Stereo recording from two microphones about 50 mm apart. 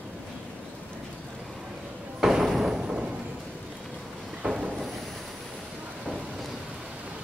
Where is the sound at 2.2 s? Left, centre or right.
Centre.